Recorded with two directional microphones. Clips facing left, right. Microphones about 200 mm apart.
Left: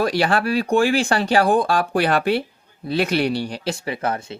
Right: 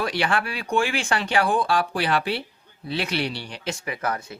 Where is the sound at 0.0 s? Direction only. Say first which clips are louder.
Left 5 dB; 40° left (ahead or behind).